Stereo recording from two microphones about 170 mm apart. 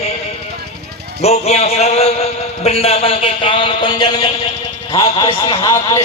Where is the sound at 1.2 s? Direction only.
40° left (ahead or behind).